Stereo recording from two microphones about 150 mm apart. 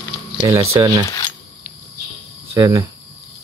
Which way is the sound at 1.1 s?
20° left (ahead or behind).